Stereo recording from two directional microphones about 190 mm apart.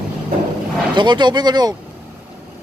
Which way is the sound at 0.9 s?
25° right (ahead or behind).